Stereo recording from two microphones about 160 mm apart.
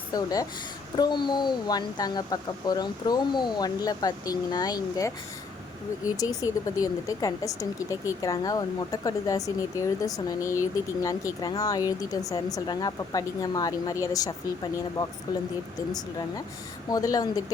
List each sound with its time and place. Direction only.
0.1 s speech: 25° left (ahead or behind)
6.1 s speech: 20° left (ahead or behind)